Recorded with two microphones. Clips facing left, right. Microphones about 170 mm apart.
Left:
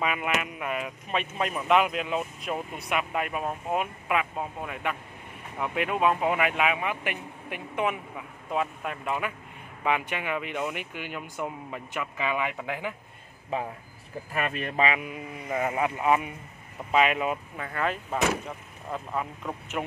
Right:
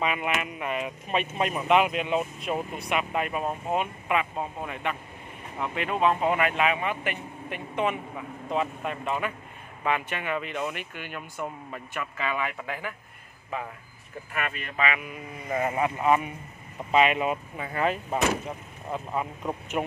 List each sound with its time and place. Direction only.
0.0 s speech: centre (ahead or behind)
1.4 s speech: 15° right (ahead or behind)
1.7 s speech: centre (ahead or behind); by 12.9 s 20° left (ahead or behind)
14.3 s speech: 35° left (ahead or behind)
15.5 s speech: 5° left (ahead or behind)
17.6 s speech: 15° right (ahead or behind)